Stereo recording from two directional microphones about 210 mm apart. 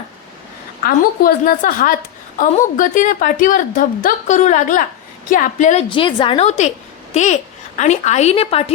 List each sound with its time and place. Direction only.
0.8 s a woman's voice: 45° left (ahead or behind)
5.9 s a woman's voice: 25° left (ahead or behind)